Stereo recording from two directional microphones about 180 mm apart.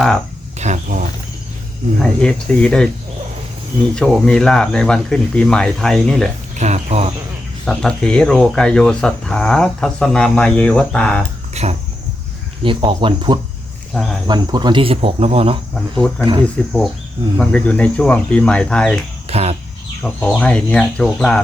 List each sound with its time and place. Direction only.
0.6 s cricket: 45° right (ahead or behind)
2.0 s speech: 5° left (ahead or behind)
3.9 s speech: 5° left (ahead or behind)
6.6 s speech: 40° right (ahead or behind)
7.6 s speech: 5° left (ahead or behind)
11.5 s speech: 35° right (ahead or behind)
13.9 s speech: centre (ahead or behind)
14.3 s speech: 25° right (ahead or behind)
15.7 s speech: 5° left (ahead or behind)
19.3 s speech: 35° right (ahead or behind)
20.0 s speech: 5° left (ahead or behind)